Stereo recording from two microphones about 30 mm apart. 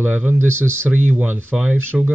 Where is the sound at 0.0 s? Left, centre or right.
Right.